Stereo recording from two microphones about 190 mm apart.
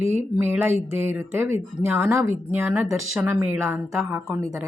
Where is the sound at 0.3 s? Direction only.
10° right (ahead or behind).